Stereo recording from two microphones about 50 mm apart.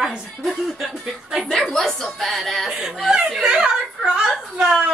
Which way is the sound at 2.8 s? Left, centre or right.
Centre.